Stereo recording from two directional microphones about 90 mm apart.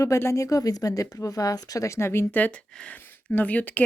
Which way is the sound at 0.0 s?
30° left (ahead or behind).